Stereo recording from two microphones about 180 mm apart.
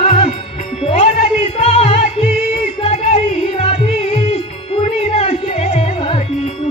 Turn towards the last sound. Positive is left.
turn(degrees=30)  # may be behind; listen again after turning